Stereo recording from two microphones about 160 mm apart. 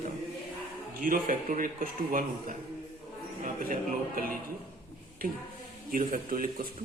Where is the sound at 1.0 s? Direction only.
60° right (ahead or behind).